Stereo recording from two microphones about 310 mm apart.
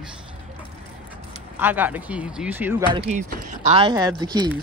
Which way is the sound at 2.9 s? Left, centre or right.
Centre.